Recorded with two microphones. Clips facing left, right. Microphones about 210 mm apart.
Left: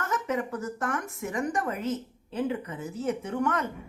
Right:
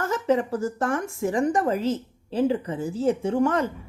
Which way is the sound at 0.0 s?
30° right (ahead or behind).